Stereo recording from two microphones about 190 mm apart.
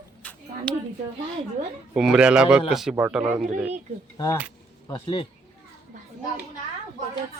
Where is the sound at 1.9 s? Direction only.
5° right (ahead or behind).